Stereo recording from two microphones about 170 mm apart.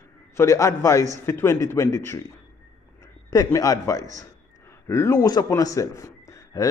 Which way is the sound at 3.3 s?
20° left (ahead or behind).